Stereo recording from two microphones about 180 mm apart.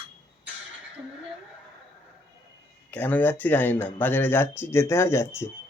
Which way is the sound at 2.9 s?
10° left (ahead or behind).